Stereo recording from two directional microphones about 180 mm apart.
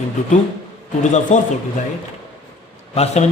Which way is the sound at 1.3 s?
40° left (ahead or behind).